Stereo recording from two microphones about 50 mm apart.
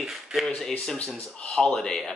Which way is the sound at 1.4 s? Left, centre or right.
Centre.